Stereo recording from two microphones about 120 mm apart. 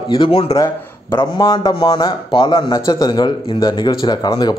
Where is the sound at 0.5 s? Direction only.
35° left (ahead or behind).